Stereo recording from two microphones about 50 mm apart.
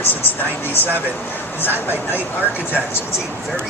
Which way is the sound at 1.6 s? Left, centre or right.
Left.